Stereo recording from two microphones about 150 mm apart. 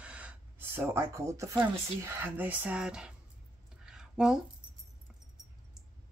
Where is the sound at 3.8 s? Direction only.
5° right (ahead or behind).